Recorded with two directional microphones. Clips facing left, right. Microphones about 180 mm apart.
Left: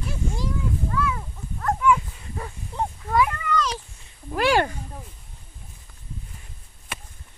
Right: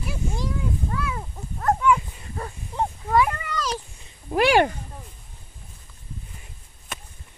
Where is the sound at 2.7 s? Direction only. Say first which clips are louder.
Right 1 dB; 15° right (ahead or behind).